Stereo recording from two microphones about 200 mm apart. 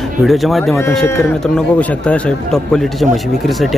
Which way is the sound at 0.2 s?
Centre (ahead or behind).